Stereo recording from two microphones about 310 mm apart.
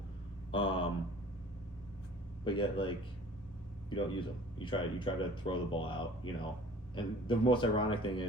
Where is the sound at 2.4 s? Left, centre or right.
Centre.